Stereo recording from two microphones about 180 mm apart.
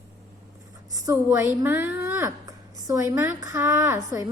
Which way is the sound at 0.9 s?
20° right (ahead or behind).